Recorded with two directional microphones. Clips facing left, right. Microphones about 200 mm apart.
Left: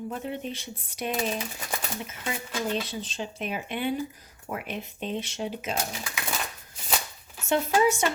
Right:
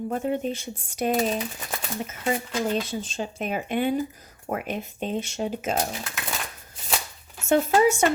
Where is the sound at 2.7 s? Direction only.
45° right (ahead or behind).